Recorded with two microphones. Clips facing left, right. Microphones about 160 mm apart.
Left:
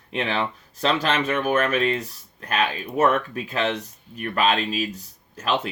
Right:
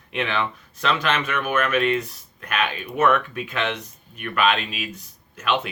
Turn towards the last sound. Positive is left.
turn(degrees=35)  # may be behind; listen again after turning